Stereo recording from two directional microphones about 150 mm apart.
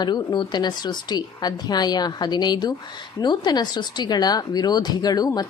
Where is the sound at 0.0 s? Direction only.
30° left (ahead or behind).